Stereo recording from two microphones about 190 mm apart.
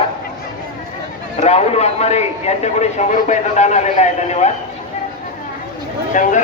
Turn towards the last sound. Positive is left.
turn(degrees=40)  # may be behind; listen again after turning